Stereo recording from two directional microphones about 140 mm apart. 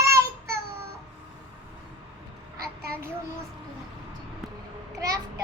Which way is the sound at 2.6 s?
90° right.